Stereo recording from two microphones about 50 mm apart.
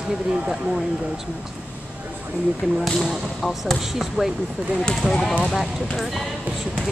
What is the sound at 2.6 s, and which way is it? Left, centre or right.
Speech, right.